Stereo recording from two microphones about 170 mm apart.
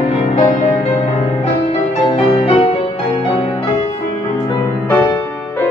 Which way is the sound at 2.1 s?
35° left (ahead or behind).